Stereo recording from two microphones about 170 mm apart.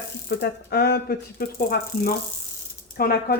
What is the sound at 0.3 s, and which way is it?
Speech, 75° left (ahead or behind).